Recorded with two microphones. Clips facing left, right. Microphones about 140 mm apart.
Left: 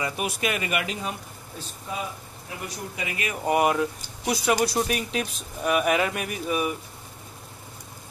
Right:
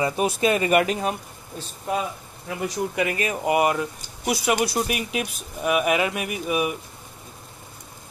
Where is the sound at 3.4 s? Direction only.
5° right (ahead or behind).